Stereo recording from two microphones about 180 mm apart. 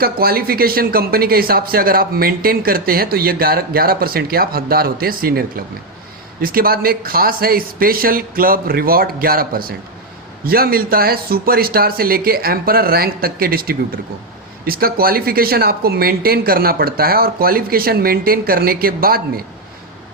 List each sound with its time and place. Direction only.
0.0 s speech: 55° right (ahead or behind)